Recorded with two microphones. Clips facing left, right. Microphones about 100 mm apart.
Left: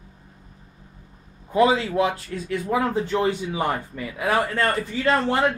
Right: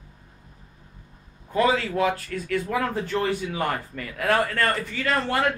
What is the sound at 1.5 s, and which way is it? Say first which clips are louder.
Speech: left 3 dB; 15° left (ahead or behind).